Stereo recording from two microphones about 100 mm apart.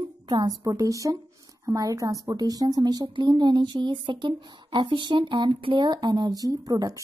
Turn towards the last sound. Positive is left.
turn(degrees=-35)  # may be behind; listen again after turning